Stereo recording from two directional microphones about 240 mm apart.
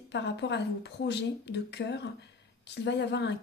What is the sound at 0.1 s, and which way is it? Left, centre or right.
Speech, left.